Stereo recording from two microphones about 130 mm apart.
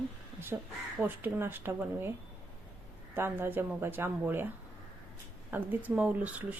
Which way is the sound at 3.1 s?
15° right (ahead or behind).